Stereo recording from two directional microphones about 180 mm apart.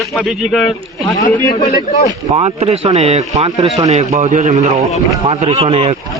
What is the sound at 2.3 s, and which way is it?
Speech, 35° right (ahead or behind).